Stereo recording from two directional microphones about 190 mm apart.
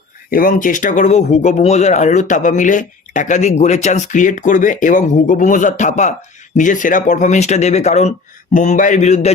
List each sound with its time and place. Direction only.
0.3 s speech: 45° left (ahead or behind)